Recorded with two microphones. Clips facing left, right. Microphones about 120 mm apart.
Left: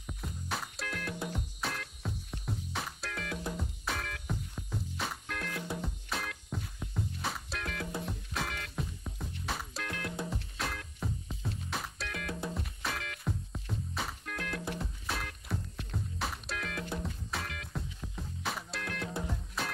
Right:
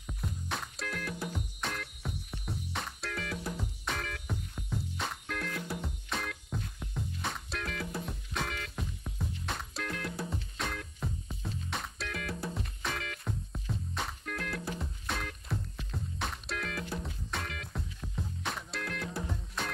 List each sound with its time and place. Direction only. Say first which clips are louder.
0.0 s music: right 2 dB; centre (ahead or behind)